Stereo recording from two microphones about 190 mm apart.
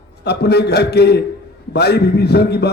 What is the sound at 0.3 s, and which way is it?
A man's voice, 60° left (ahead or behind).